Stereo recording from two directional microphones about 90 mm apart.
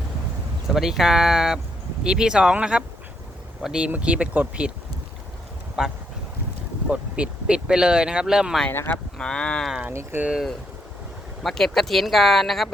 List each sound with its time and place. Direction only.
0.7 s speech: 5° right (ahead or behind)
5.8 s speech: 5° right (ahead or behind)
9.1 s speech: 10° left (ahead or behind)
9.9 s speech: 30° right (ahead or behind)
11.4 s speech: 5° left (ahead or behind)